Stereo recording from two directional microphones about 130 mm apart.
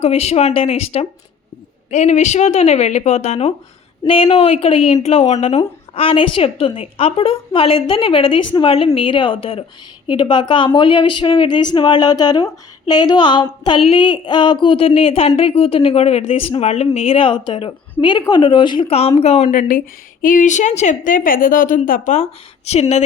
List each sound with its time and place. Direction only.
0.0 s a woman's voice: 55° left (ahead or behind)
1.9 s a woman's voice: 65° left (ahead or behind); by 9.6 s 45° left (ahead or behind)
10.1 s a woman's voice: 35° left (ahead or behind); by 22.3 s 70° left (ahead or behind)
22.7 s a woman's voice: 55° left (ahead or behind)